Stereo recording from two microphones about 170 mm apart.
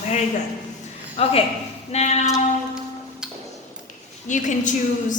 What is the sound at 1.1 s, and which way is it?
Speech, 35° left (ahead or behind).